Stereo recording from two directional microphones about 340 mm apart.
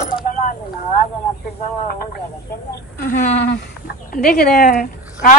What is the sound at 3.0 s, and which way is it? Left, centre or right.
A woman's voice, left.